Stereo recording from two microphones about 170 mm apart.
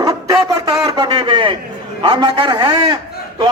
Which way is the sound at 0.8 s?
20° right (ahead or behind).